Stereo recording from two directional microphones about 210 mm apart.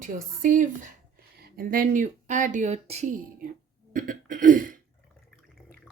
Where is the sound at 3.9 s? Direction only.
40° right (ahead or behind).